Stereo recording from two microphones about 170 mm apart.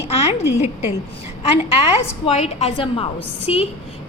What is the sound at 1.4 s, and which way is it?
A woman's voice, 35° left (ahead or behind).